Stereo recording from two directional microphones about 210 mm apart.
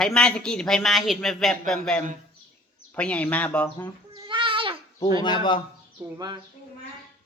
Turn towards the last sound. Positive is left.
turn(degrees=-15)  # may be behind; listen again after turning